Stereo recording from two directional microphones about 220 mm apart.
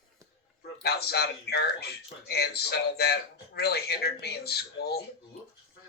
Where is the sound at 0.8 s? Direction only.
45° left (ahead or behind).